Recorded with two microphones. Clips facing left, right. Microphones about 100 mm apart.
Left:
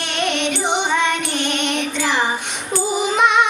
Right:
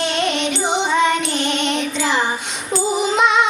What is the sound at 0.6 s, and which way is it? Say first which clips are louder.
Music: right 2 dB; 20° left (ahead or behind).